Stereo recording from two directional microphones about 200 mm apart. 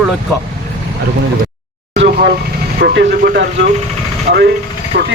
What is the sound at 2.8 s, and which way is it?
Speech, 60° right (ahead or behind).